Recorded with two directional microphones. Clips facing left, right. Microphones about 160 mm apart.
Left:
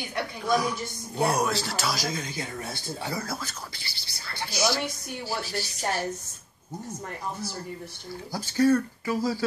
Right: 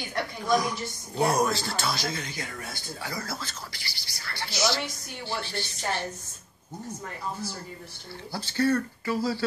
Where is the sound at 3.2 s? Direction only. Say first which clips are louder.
Left 2 dB; 15° left (ahead or behind).